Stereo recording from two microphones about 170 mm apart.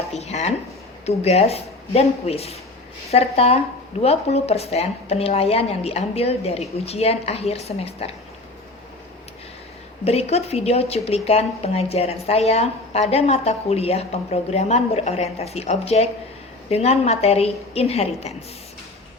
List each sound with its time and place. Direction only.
0.1 s a woman's voice: 40° left (ahead or behind)
10.0 s a woman's voice: 35° left (ahead or behind)